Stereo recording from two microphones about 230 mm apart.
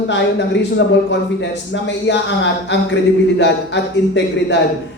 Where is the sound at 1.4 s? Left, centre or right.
Left.